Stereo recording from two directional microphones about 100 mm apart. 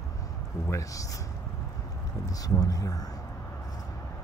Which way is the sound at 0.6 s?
35° left (ahead or behind).